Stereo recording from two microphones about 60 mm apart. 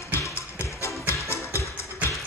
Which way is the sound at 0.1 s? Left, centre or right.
Left.